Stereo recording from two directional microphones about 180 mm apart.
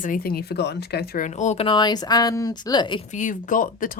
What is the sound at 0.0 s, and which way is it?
Speech, 50° left (ahead or behind).